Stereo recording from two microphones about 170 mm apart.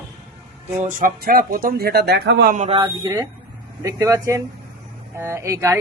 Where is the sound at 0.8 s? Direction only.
50° right (ahead or behind); by 2.6 s 70° right (ahead or behind).